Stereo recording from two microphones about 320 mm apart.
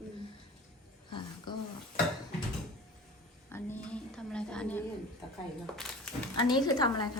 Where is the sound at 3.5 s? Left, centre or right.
Centre.